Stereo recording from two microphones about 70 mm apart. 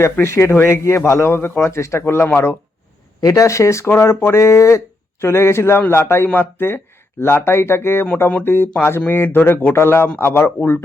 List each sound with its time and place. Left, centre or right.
0.0 s speech: left
3.2 s speech: left